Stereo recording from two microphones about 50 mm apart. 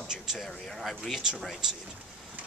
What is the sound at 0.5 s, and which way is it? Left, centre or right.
Speech, centre.